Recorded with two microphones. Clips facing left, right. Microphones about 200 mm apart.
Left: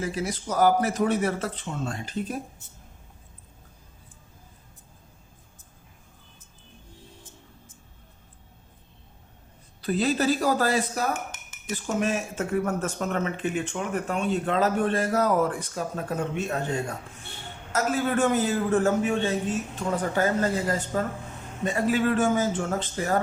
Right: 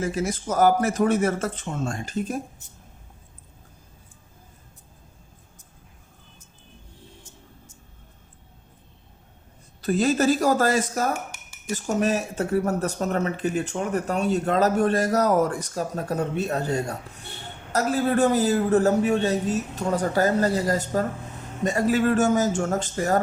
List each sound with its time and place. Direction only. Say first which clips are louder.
0.0 s speech: right 3 dB; 45° right (ahead or behind)
9.8 s speech: right 3 dB; 45° right (ahead or behind)